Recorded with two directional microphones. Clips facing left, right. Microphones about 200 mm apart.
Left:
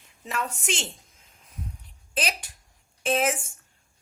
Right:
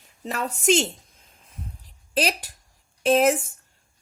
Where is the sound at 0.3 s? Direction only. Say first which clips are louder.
Right 8 dB; 40° right (ahead or behind).